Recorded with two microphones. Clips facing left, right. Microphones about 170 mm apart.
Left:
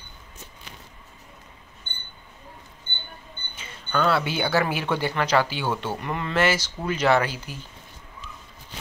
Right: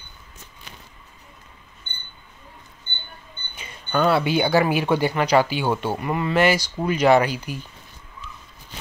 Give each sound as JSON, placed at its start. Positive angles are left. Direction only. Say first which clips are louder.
{"t": 3.5, "sound": "speech", "louder": "right 3 dB", "side_deg": -15}